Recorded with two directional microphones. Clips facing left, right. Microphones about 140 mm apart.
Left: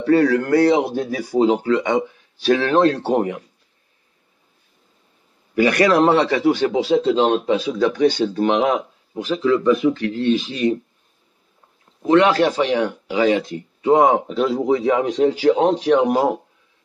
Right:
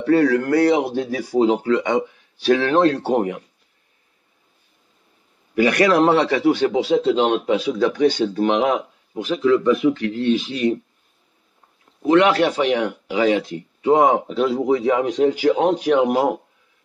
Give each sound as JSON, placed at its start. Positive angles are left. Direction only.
{"t": 0.0, "sound": "a man's voice", "side_deg": 30}
{"t": 5.6, "sound": "a man's voice", "side_deg": 35}
{"t": 12.1, "sound": "a man's voice", "side_deg": 35}